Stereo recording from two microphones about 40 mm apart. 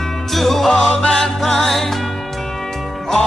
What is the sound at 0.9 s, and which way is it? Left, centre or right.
Music, left.